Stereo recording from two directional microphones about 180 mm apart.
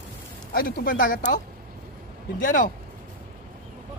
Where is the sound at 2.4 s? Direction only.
45° left (ahead or behind).